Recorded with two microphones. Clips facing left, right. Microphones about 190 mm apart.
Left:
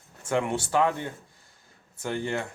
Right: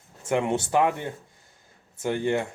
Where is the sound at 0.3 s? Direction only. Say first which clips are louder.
Right 2 dB; 20° right (ahead or behind).